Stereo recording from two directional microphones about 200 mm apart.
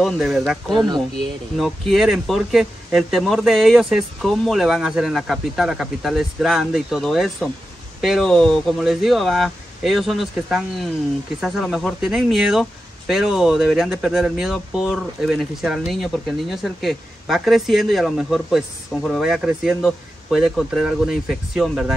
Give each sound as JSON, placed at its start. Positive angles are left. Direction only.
{"t": 0.0, "sound": "speech", "side_deg": 0}